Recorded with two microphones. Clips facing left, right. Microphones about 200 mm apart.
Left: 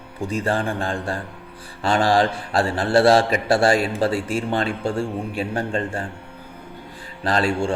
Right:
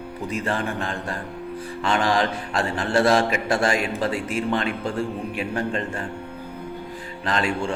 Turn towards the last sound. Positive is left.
turn(degrees=35)  # may be behind; listen again after turning